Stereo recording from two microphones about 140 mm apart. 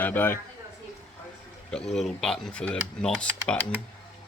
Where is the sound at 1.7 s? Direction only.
5° left (ahead or behind).